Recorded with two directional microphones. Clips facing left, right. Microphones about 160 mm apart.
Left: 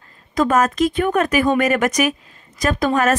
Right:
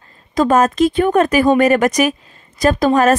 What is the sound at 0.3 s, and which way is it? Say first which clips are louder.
A woman's voice: right 3 dB; 30° right (ahead or behind).